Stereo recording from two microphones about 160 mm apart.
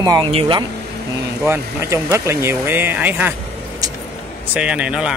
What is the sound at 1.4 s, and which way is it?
Speech, 15° right (ahead or behind).